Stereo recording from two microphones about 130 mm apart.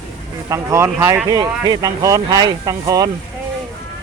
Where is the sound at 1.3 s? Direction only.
30° right (ahead or behind).